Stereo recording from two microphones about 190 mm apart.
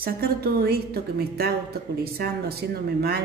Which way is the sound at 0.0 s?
55° right (ahead or behind).